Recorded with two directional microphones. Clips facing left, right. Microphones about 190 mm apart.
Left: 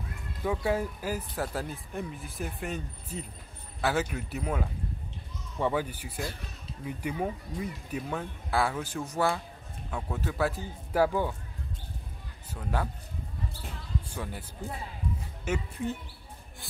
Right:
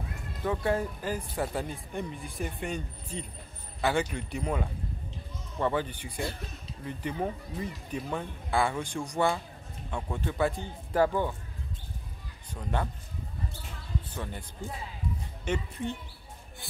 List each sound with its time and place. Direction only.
0.4 s speech: 5° left (ahead or behind)
12.5 s speech: centre (ahead or behind)
14.0 s speech: 10° left (ahead or behind)
15.4 s speech: 5° left (ahead or behind)